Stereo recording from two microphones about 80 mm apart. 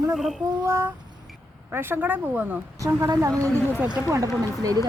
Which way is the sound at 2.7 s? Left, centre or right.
Right.